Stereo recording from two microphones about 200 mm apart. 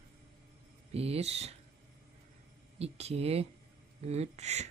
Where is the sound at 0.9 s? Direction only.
30° right (ahead or behind).